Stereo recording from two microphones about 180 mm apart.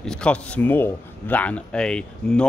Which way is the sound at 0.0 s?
5° left (ahead or behind).